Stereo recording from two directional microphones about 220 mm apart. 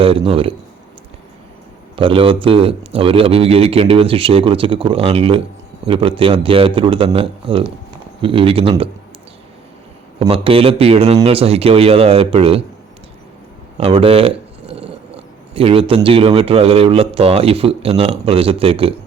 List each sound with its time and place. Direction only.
0.0 s speech: 25° right (ahead or behind)
2.0 s speech: 25° right (ahead or behind)
10.2 s speech: 25° right (ahead or behind)
13.7 s speech: 25° right (ahead or behind)